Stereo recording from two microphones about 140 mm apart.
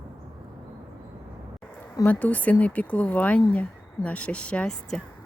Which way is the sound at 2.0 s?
10° left (ahead or behind).